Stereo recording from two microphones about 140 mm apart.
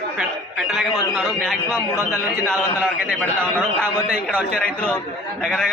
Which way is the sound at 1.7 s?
25° left (ahead or behind).